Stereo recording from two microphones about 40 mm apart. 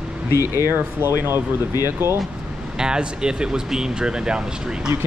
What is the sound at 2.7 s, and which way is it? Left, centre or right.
Speech, centre.